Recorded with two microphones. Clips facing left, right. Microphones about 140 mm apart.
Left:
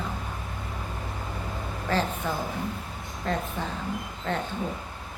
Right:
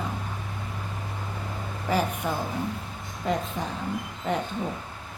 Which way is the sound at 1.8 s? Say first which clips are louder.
Right 1 dB; 10° right (ahead or behind).